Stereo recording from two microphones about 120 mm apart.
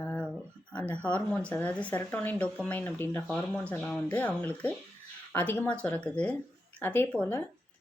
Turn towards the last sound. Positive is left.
turn(degrees=15)  # may be behind; listen again after turning